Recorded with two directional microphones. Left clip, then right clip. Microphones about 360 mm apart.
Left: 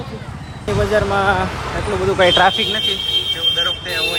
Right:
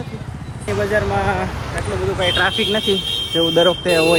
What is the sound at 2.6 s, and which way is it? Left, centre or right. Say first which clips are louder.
Speech: even; centre.